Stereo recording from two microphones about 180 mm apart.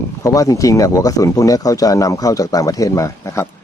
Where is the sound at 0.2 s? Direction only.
15° left (ahead or behind).